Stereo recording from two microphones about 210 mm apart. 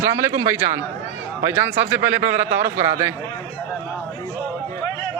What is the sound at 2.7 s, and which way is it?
Speech, 35° right (ahead or behind).